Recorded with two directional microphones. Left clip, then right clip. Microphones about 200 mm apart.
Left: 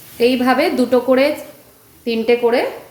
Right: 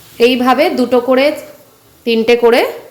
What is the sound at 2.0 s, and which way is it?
Speech, 30° right (ahead or behind).